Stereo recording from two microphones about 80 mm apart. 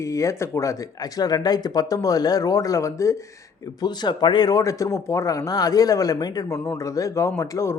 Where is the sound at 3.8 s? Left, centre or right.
Left.